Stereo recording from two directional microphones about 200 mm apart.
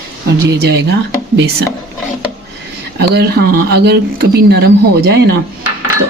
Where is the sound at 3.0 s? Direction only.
55° right (ahead or behind).